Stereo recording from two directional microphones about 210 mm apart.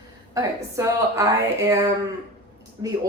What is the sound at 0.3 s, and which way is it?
Speech, 15° right (ahead or behind).